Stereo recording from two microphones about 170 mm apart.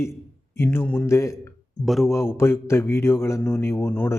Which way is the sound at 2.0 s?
15° left (ahead or behind).